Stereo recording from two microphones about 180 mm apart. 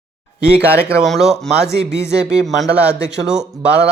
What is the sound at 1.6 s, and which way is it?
Speech, 65° right (ahead or behind).